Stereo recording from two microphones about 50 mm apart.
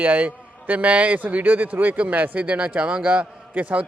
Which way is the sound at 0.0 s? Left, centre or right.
Right.